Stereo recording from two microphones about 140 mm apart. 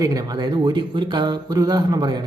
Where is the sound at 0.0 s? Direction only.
25° right (ahead or behind).